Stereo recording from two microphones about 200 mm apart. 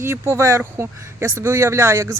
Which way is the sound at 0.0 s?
15° right (ahead or behind).